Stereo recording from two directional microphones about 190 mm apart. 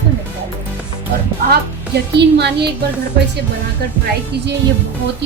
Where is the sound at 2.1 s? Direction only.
60° right (ahead or behind).